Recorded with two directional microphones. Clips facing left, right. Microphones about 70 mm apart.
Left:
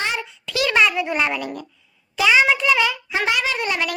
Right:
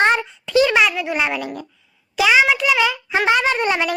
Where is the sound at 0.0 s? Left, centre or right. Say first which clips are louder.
Right 9 dB; right.